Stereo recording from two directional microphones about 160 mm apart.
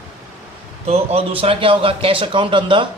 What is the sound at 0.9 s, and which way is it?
A man's voice, 40° right (ahead or behind).